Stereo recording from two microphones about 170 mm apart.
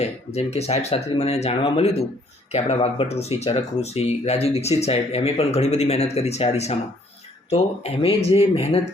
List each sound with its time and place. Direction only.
0.0 s speech: 40° left (ahead or behind)